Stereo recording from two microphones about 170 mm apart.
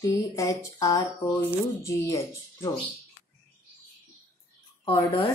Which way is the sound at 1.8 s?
20° left (ahead or behind).